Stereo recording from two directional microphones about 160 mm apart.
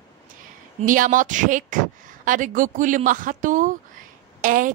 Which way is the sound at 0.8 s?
55° right (ahead or behind).